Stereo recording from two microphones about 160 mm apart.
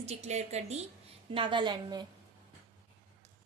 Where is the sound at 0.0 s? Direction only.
45° right (ahead or behind).